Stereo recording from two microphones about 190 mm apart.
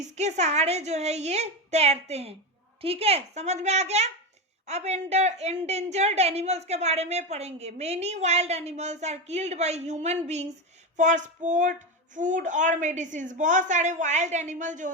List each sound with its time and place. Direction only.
0.0 s a woman's voice: 35° right (ahead or behind)